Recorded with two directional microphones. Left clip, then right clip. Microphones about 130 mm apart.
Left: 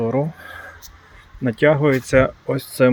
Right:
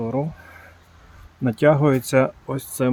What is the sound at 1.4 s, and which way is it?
Speech, 25° right (ahead or behind).